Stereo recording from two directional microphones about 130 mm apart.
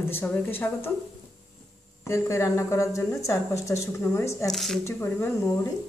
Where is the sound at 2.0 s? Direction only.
20° left (ahead or behind).